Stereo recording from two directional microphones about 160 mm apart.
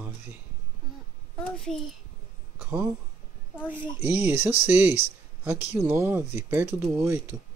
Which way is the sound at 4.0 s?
10° right (ahead or behind).